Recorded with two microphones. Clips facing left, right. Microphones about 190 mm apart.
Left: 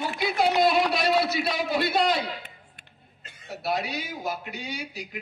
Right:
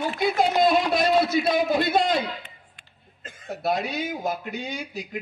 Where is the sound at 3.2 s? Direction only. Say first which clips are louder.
Right 5 dB; 45° right (ahead or behind).